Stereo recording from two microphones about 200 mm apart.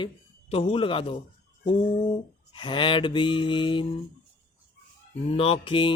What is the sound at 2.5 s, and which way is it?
Speech, 25° left (ahead or behind).